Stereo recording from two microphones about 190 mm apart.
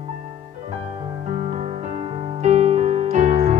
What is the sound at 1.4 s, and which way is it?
Music, 35° right (ahead or behind).